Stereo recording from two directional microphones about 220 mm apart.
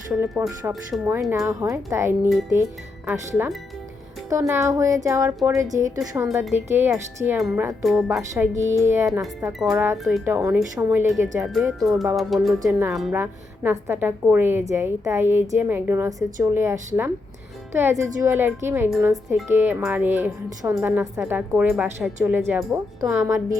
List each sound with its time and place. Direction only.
0.4 s a woman's voice: 5° right (ahead or behind)
6.0 s a woman's voice: centre (ahead or behind)
7.9 s a woman's voice: centre (ahead or behind)
9.5 s speech: centre (ahead or behind)
9.7 s a woman's voice: 15° right (ahead or behind)